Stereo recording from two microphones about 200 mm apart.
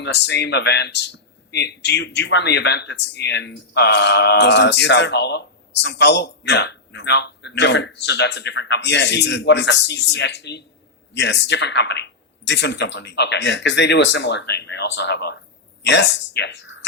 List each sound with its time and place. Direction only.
0.0 s speech: 60° left (ahead or behind)